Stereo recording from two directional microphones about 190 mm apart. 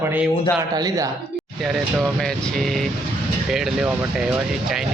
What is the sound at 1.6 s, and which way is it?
Speech, centre (ahead or behind).